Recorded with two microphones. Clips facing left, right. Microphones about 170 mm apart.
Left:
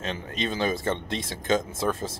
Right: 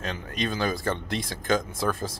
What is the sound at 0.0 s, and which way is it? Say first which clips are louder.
Speech: even; 25° left (ahead or behind).